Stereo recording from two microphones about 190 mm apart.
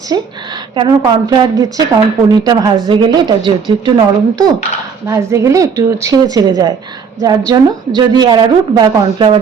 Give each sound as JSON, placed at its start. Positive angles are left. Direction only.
{"t": 0.1, "sound": "a woman's voice", "side_deg": -20}